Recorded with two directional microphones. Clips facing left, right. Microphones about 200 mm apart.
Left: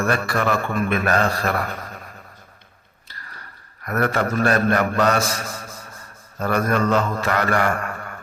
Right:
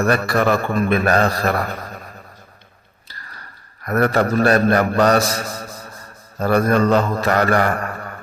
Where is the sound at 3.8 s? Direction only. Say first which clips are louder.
Right 4 dB; 35° right (ahead or behind).